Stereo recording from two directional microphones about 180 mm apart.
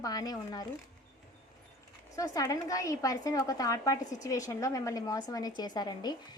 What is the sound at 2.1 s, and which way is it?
A woman's voice, 20° left (ahead or behind).